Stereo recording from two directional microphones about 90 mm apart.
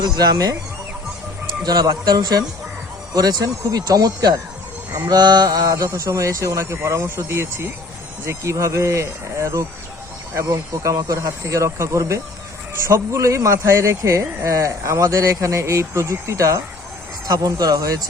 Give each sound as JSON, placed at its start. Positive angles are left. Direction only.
{"t": 0.0, "sound": "speech", "side_deg": -45}
{"t": 1.6, "sound": "speech", "side_deg": -50}